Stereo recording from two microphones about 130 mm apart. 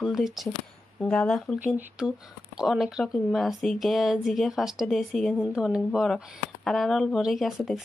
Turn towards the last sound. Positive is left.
turn(degrees=0)  # may be behind; listen again after turning